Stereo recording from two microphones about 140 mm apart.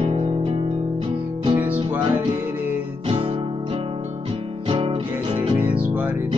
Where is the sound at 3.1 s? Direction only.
40° right (ahead or behind).